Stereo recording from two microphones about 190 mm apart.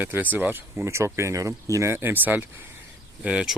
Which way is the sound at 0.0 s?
10° right (ahead or behind).